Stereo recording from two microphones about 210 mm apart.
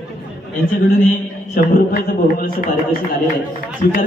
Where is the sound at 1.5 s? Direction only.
45° left (ahead or behind).